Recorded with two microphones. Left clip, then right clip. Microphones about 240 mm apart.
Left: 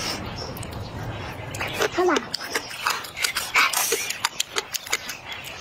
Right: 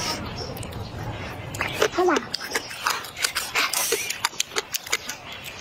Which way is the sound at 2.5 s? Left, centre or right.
Centre.